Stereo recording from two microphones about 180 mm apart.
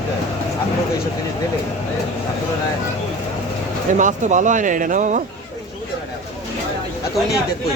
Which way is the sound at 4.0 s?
45° right (ahead or behind).